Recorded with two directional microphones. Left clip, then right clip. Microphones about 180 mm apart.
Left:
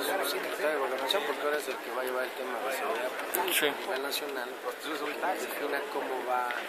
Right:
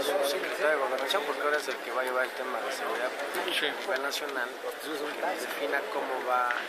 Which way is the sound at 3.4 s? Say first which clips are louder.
Left 2 dB; 30° left (ahead or behind).